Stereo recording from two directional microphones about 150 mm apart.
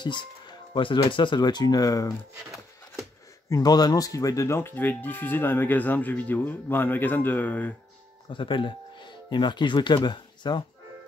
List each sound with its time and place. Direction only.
0.0 s speech: 30° left (ahead or behind)
3.4 s speech: 25° left (ahead or behind)
8.3 s speech: 35° left (ahead or behind)